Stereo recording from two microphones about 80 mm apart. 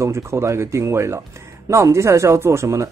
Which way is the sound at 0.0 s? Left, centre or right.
Right.